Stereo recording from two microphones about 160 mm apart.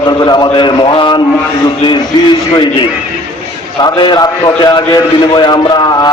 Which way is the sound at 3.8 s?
30° left (ahead or behind).